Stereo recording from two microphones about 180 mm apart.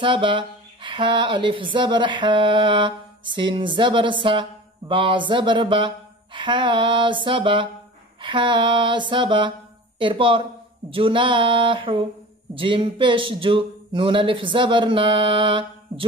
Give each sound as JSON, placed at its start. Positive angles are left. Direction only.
{"t": 0.0, "sound": "speech", "side_deg": -25}